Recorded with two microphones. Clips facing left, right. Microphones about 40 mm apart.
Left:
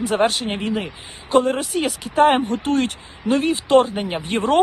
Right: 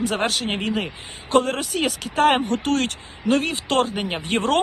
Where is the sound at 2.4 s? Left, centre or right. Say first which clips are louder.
Left 1 dB; right.